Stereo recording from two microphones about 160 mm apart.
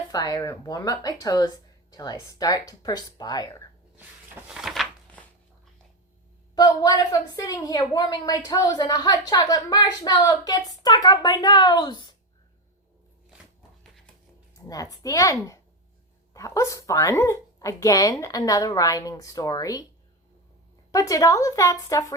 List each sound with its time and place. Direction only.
0.1 s a woman's voice: 25° left (ahead or behind)
3.9 s a sound: 10° right (ahead or behind)
6.6 s a woman's voice: 25° left (ahead or behind)
14.7 s a woman's voice: 20° left (ahead or behind)
20.9 s a woman's voice: 20° left (ahead or behind)